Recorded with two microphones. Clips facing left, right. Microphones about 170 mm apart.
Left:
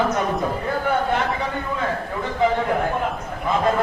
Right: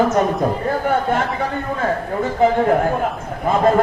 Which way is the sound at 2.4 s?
45° right (ahead or behind).